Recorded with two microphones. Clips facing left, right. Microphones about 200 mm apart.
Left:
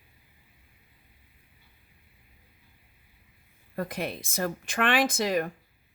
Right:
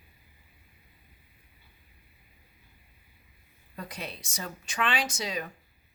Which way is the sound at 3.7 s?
55° left (ahead or behind).